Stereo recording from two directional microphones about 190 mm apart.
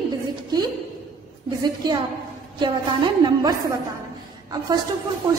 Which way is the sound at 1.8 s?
20° right (ahead or behind).